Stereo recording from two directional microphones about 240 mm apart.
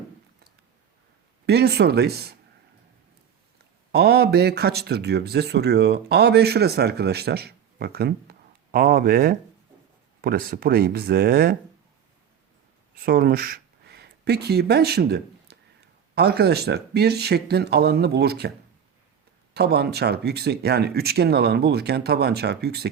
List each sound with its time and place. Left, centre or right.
1.5 s speech: right
3.9 s speech: right
13.0 s speech: right
19.5 s speech: right